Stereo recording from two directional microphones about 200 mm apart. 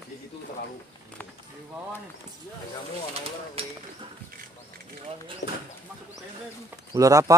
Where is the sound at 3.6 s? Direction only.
30° right (ahead or behind).